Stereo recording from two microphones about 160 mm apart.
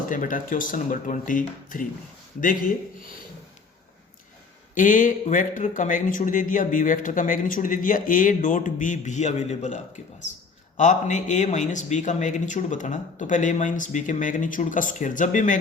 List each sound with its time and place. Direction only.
0.1 s speech: 55° left (ahead or behind)
4.7 s a man's voice: 55° left (ahead or behind)